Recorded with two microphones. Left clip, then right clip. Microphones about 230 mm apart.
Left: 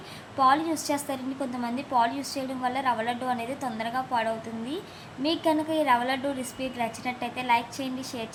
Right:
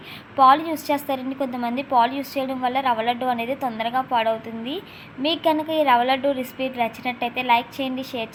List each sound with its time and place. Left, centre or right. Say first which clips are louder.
0.3 s a woman's voice: right 7 dB; centre